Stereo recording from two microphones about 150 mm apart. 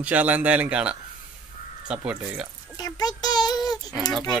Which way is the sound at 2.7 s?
25° left (ahead or behind).